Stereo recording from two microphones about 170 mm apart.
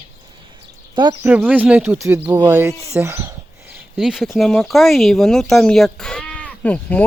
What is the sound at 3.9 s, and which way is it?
Speech, centre (ahead or behind).